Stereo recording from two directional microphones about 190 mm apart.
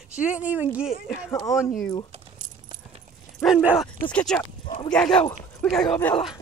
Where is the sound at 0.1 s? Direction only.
5° right (ahead or behind).